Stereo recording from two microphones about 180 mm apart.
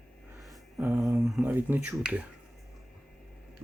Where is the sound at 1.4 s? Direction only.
10° right (ahead or behind).